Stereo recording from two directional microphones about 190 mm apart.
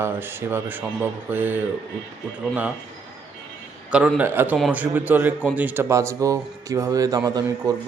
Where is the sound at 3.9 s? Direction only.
5° right (ahead or behind).